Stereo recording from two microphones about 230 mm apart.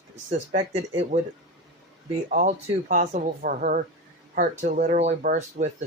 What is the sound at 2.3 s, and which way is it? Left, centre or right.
Speech, right.